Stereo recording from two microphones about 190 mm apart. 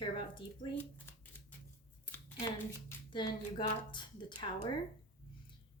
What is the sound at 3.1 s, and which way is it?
A woman's voice, 25° left (ahead or behind).